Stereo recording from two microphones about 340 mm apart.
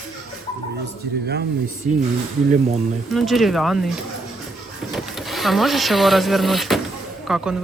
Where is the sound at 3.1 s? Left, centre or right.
Centre.